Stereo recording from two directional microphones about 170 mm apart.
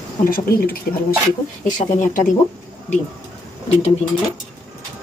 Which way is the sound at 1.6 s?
50° left (ahead or behind).